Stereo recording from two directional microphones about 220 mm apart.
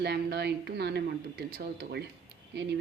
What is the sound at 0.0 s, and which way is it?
Speech, 50° right (ahead or behind).